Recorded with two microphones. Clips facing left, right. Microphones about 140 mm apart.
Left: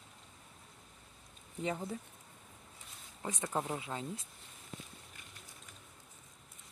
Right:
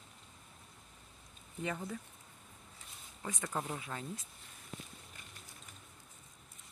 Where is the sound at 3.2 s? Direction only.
25° left (ahead or behind).